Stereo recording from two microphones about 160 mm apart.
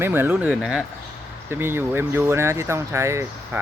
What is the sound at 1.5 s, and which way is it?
Speech, 15° right (ahead or behind).